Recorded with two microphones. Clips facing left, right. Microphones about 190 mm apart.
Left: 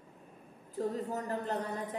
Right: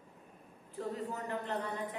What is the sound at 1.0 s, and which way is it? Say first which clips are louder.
Speech: left 3 dB; 40° left (ahead or behind).